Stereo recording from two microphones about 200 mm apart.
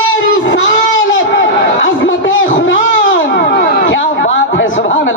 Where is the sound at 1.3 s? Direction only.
65° left (ahead or behind).